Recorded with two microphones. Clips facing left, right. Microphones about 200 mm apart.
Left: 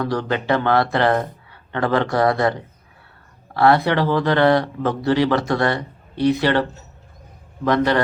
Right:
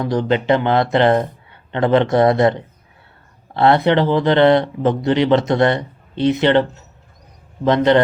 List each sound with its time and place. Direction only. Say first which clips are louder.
0.0 s speech: right 4 dB; 20° right (ahead or behind)